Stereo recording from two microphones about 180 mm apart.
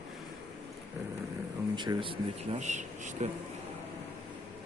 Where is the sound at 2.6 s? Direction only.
40° right (ahead or behind).